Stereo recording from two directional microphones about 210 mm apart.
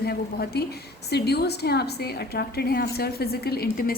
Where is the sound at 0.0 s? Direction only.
50° left (ahead or behind).